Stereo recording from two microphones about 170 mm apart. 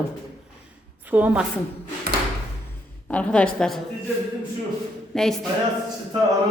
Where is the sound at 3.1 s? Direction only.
5° left (ahead or behind).